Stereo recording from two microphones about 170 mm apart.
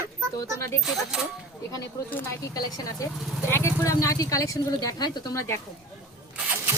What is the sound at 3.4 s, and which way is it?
Speech, 15° left (ahead or behind).